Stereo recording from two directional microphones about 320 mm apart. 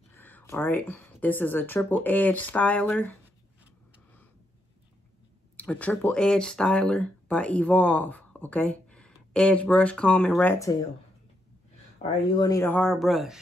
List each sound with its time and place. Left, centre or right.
0.1 s speech: centre
5.6 s speech: centre
12.0 s speech: left
12.4 s speech: centre